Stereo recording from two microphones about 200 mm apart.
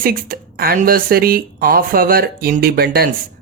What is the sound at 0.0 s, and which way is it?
A woman's voice, 45° right (ahead or behind).